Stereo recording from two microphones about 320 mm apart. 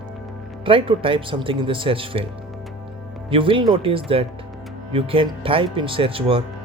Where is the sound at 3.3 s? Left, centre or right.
Centre.